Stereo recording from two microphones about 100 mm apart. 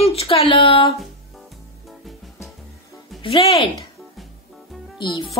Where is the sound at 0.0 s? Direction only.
90° left; by 0.9 s 60° left (ahead or behind).